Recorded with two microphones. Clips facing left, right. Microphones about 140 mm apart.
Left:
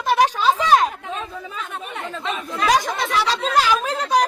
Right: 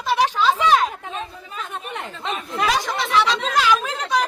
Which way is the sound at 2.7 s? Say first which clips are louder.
Left 2 dB; 45° left (ahead or behind).